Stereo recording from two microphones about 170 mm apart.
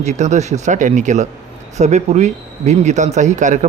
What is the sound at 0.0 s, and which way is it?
Speech, 45° right (ahead or behind).